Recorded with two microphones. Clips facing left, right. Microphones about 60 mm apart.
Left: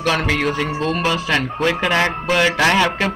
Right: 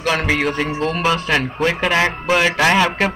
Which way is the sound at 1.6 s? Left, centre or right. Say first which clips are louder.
Even; centre.